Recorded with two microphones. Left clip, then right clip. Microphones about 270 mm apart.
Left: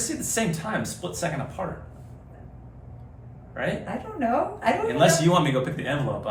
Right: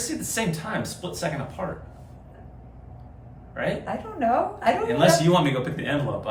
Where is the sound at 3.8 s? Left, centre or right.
Centre.